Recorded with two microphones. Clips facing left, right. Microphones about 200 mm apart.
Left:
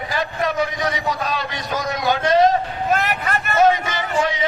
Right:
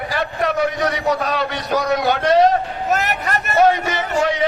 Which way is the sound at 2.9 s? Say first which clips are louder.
Even; 40° right (ahead or behind).